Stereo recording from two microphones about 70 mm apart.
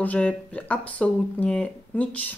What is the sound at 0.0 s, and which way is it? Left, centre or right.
Speech, left.